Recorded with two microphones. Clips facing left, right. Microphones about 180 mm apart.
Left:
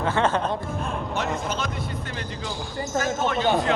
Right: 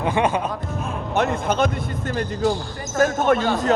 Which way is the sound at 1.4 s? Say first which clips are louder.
Right 7 dB; 55° right (ahead or behind).